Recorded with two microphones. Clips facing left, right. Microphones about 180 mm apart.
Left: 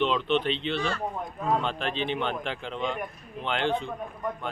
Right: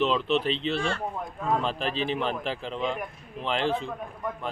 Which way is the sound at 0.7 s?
30° right (ahead or behind).